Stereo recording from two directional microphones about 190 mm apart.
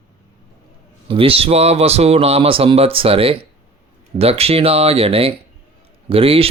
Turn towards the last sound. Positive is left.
turn(degrees=-30)  # may be behind; listen again after turning